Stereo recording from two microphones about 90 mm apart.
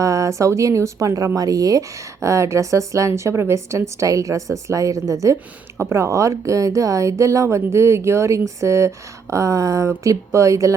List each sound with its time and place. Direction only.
0.0 s a woman's voice: 35° right (ahead or behind)